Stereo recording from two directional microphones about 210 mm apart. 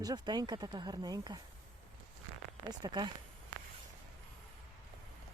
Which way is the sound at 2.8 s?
20° right (ahead or behind).